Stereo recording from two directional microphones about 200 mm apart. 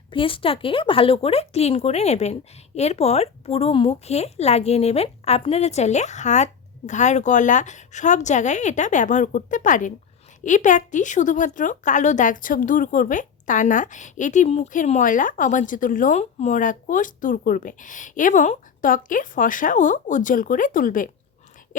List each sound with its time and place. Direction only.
0.1 s a woman's voice: 25° left (ahead or behind); by 21.1 s 40° left (ahead or behind)